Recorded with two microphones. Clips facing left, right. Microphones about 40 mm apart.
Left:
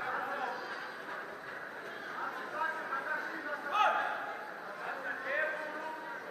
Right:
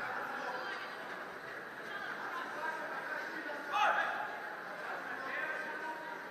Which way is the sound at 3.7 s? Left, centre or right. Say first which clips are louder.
Left 2 dB; centre.